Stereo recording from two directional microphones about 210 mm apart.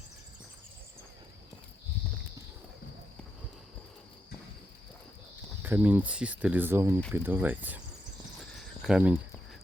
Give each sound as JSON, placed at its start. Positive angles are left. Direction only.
{"t": 5.6, "sound": "speech", "side_deg": -10}
{"t": 8.8, "sound": "speech", "side_deg": -5}